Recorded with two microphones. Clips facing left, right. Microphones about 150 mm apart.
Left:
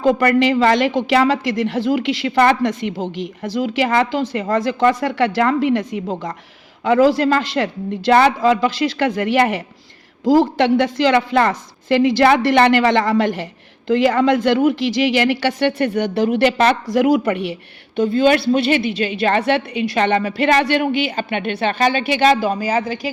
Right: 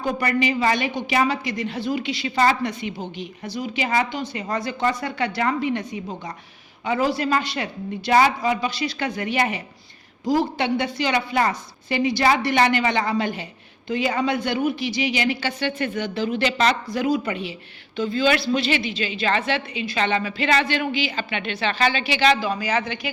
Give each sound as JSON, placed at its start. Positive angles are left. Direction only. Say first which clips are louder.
{"t": 0.0, "sound": "a woman's voice", "louder": "left 8 dB", "side_deg": 75}
{"t": 3.0, "sound": "speech", "louder": "left 7 dB", "side_deg": 90}
{"t": 3.8, "sound": "a woman's voice", "louder": "left 6 dB", "side_deg": 65}
{"t": 10.2, "sound": "a woman's voice", "louder": "left 8 dB", "side_deg": 90}
{"t": 16.9, "sound": "a woman's voice", "louder": "left 8 dB", "side_deg": 80}